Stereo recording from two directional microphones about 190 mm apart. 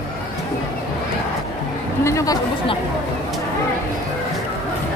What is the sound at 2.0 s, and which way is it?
Speech, 15° left (ahead or behind).